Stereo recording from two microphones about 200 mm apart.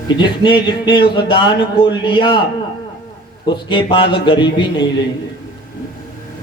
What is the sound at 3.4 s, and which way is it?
Speech, 25° left (ahead or behind).